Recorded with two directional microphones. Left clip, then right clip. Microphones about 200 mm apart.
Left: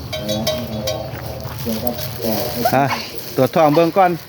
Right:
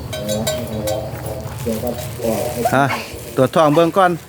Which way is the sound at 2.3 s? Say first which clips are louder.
Even; 40° left (ahead or behind).